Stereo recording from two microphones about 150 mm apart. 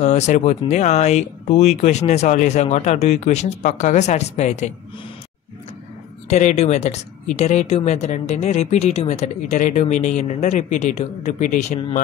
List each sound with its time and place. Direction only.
0.0 s speech: 50° left (ahead or behind)
6.2 s speech: 50° left (ahead or behind)